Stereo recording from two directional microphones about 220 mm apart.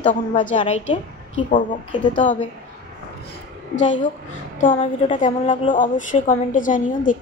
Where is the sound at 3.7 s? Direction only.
35° left (ahead or behind).